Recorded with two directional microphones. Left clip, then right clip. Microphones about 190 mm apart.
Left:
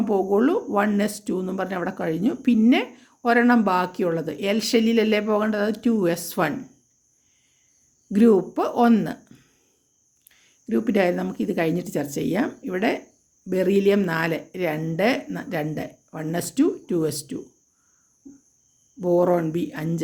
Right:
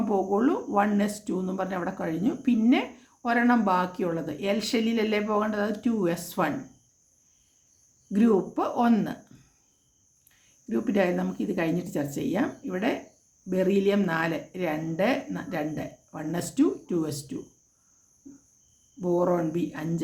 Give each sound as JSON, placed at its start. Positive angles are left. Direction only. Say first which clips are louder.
{"t": 0.0, "sound": "speech", "louder": "left 4 dB", "side_deg": 40}
{"t": 8.1, "sound": "speech", "louder": "left 6 dB", "side_deg": 45}
{"t": 10.7, "sound": "speech", "louder": "left 4 dB", "side_deg": 45}
{"t": 18.9, "sound": "speech", "louder": "left 5 dB", "side_deg": 40}